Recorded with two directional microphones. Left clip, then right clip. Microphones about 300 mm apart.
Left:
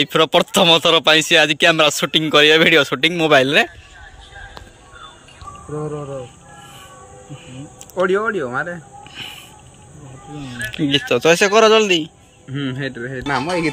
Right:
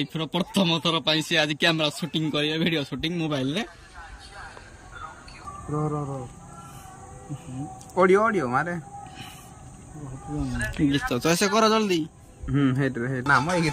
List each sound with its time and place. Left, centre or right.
0.0 s speech: centre
8.0 s speech: right
9.2 s speech: centre; by 13.6 s right